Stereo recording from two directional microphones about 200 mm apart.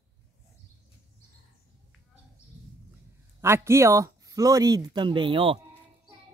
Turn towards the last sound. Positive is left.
turn(degrees=-25)  # may be behind; listen again after turning